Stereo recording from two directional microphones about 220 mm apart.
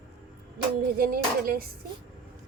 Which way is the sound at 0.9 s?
40° right (ahead or behind).